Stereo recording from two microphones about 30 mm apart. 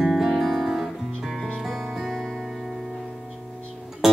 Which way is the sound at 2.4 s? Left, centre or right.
Centre.